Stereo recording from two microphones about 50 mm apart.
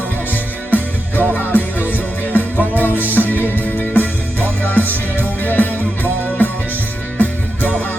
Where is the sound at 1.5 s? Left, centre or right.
Left.